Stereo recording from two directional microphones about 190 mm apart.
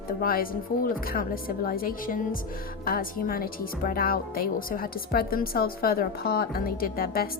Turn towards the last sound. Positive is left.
turn(degrees=50)  # may be behind; listen again after turning